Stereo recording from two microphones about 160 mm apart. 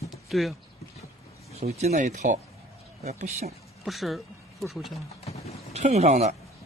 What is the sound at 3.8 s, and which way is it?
Speech, centre (ahead or behind).